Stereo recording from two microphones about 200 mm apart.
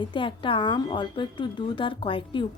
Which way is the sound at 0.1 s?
25° left (ahead or behind).